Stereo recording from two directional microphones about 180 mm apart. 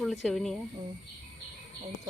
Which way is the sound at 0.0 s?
Centre (ahead or behind).